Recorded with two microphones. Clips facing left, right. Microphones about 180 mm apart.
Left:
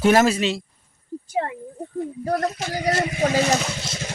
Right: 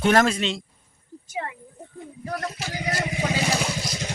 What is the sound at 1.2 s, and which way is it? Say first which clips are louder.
Speech: left 6 dB; 35° left (ahead or behind).